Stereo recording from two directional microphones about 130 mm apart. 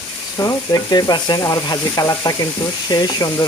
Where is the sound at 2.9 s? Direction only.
35° left (ahead or behind).